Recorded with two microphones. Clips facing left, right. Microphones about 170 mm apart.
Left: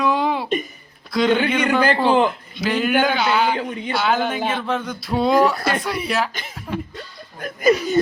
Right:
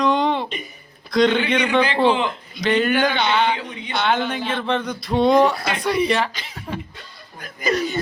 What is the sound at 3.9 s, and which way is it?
Speech, 5° left (ahead or behind).